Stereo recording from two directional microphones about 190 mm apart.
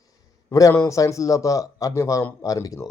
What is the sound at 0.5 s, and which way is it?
Speech, 15° left (ahead or behind).